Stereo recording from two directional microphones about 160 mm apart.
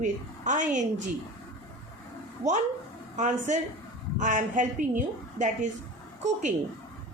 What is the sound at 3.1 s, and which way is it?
A woman's voice, 50° right (ahead or behind).